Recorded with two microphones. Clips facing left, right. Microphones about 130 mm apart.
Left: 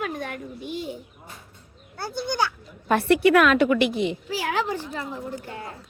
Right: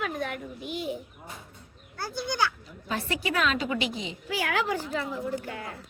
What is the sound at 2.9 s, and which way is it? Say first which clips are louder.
A woman's voice: left 12 dB; 65° left (ahead or behind).